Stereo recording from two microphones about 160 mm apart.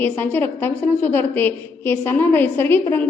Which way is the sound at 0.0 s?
10° left (ahead or behind).